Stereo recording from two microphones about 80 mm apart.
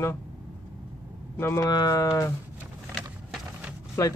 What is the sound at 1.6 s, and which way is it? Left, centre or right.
Speech, left.